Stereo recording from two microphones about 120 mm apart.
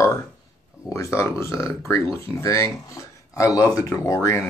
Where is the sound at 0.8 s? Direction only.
25° left (ahead or behind).